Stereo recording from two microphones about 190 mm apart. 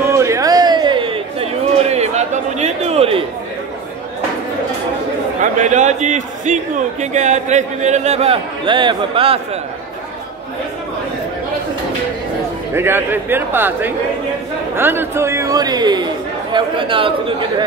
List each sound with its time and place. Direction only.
0.0 s a sound: 15° right (ahead or behind); by 3.3 s 30° right (ahead or behind)
5.4 s a man's voice: 40° right (ahead or behind)
12.7 s a man's voice: 10° right (ahead or behind)